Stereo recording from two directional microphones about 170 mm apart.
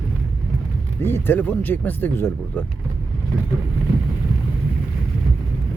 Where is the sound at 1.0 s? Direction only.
15° left (ahead or behind).